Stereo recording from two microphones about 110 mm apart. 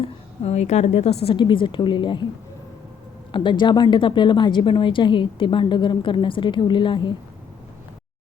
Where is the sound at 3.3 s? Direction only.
45° left (ahead or behind).